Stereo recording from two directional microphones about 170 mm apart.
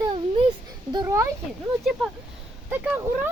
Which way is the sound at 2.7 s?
10° right (ahead or behind).